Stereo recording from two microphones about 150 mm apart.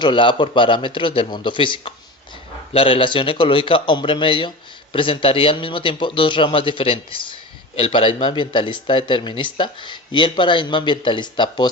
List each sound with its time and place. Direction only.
0.0 s a man's voice: 35° left (ahead or behind)